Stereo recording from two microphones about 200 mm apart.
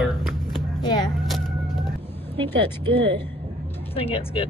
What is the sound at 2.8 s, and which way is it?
Speech, 25° right (ahead or behind).